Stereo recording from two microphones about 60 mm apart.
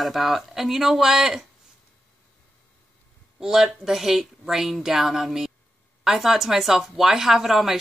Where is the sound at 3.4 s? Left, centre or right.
Centre.